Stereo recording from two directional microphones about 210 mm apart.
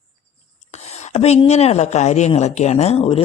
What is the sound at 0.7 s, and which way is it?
Speech, 30° left (ahead or behind).